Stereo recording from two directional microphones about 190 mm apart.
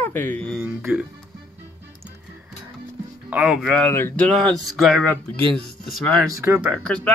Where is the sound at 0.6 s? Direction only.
10° right (ahead or behind).